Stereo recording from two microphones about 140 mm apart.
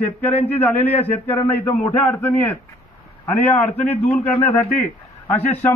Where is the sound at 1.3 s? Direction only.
15° left (ahead or behind).